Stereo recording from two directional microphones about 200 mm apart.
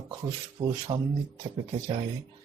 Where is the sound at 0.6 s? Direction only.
25° right (ahead or behind).